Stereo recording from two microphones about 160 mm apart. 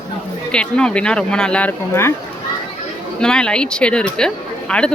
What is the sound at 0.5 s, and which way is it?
Speech, 5° left (ahead or behind).